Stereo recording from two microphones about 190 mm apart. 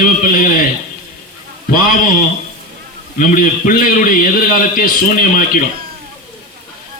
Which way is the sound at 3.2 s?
45° left (ahead or behind).